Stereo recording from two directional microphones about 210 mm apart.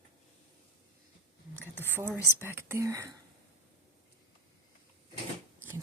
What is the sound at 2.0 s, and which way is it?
Speech, 10° right (ahead or behind).